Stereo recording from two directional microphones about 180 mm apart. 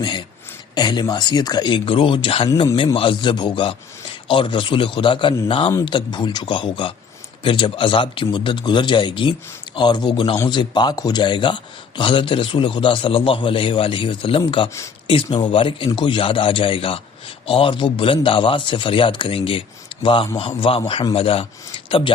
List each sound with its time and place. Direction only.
0.0 s speech: 25° left (ahead or behind)
2.5 s a man's voice: 15° left (ahead or behind)
2.7 s a man's voice: 30° left (ahead or behind)